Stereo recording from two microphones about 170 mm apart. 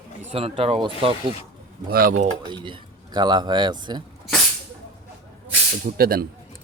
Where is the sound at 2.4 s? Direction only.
30° right (ahead or behind).